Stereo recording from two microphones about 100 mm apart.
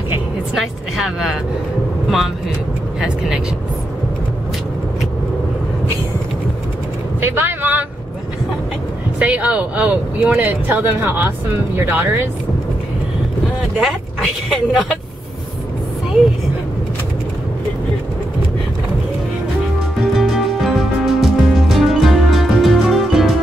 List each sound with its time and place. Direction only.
0.6 s speech: 5° right (ahead or behind)
7.2 s vehicle: 20° right (ahead or behind)
9.2 s speech: 15° right (ahead or behind)
13.7 s speech: 5° right (ahead or behind)
20.1 s music: centre (ahead or behind)